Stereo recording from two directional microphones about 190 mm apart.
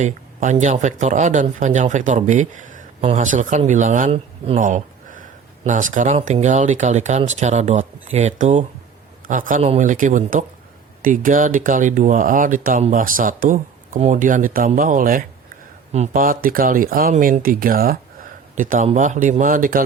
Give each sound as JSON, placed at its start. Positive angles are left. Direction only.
{"t": 0.0, "sound": "speech", "side_deg": -40}
{"t": 4.5, "sound": "a sound", "side_deg": -45}
{"t": 5.6, "sound": "speech", "side_deg": -40}